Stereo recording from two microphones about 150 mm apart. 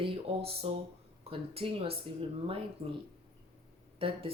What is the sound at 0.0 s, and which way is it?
Speech, 40° right (ahead or behind).